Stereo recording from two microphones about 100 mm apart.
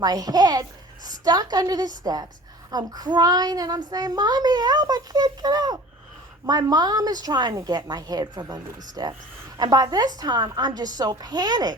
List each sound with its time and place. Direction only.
0.0 s child singing: 40° right (ahead or behind)